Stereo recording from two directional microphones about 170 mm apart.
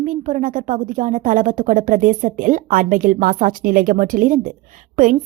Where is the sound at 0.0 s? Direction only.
45° right (ahead or behind).